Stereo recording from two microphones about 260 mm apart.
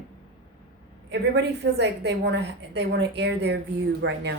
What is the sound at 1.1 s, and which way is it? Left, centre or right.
A woman's voice, right.